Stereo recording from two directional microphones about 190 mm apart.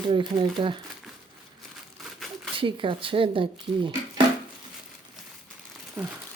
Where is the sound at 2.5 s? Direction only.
25° right (ahead or behind).